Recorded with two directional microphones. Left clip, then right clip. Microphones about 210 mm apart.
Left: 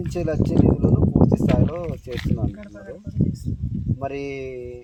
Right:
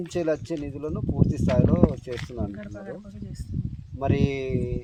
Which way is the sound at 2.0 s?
10° left (ahead or behind).